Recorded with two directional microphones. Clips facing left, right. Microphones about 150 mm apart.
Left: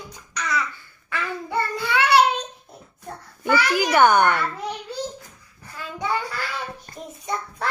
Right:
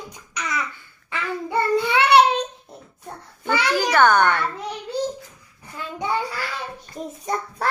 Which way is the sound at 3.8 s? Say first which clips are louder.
Even; 10° left (ahead or behind).